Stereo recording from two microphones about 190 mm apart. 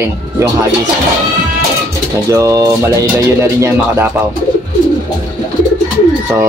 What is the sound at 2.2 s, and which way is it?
Speech, 15° right (ahead or behind).